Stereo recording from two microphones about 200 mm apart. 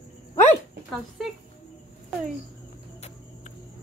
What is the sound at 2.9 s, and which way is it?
Cricket, 35° left (ahead or behind).